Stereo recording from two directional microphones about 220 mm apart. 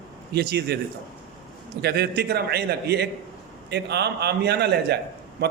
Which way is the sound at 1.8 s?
45° right (ahead or behind).